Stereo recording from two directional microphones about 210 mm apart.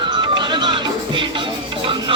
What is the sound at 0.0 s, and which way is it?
Music, 20° right (ahead or behind).